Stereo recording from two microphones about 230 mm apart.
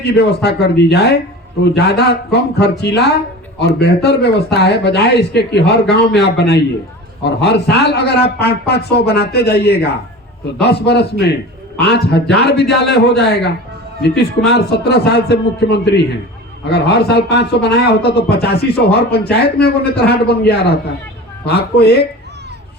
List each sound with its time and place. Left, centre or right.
0.0 s speech: left